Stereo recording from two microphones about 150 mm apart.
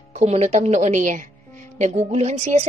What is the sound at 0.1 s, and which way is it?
A woman's voice, 45° right (ahead or behind).